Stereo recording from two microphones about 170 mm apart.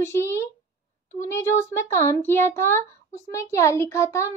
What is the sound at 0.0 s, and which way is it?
Speech, 15° left (ahead or behind).